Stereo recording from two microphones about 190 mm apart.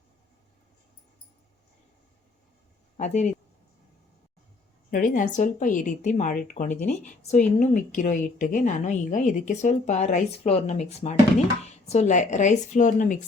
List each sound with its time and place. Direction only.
3.0 s a woman's voice: 40° left (ahead or behind)
4.9 s a woman's voice: 45° left (ahead or behind)